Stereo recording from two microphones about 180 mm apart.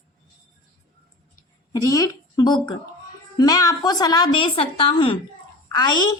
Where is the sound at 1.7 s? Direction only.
20° left (ahead or behind).